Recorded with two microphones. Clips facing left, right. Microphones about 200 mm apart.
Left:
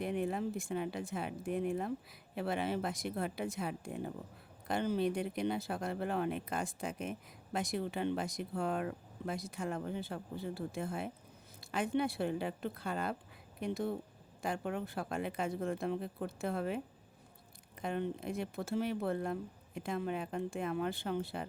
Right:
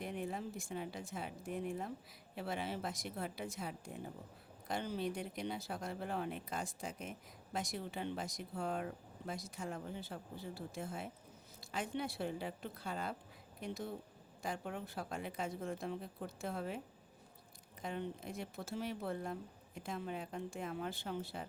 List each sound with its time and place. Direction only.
0.0 s speech: 65° left (ahead or behind)